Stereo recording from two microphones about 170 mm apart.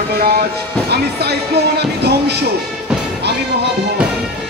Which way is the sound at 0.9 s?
70° right (ahead or behind).